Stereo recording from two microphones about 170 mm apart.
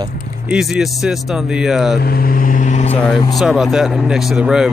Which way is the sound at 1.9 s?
60° left (ahead or behind).